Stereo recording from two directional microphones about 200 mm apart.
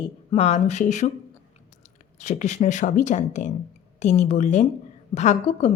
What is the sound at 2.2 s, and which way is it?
A woman's voice, 35° left (ahead or behind).